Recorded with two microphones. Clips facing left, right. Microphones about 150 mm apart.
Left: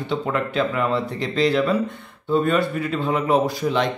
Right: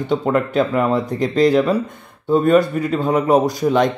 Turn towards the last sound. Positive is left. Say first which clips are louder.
# right 5 dB
turn(degrees=-45)  # may be behind; listen again after turning